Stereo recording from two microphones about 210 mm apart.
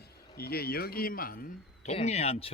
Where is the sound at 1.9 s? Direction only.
30° left (ahead or behind).